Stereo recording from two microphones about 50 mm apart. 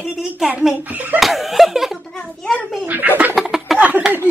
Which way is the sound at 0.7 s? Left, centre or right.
Right.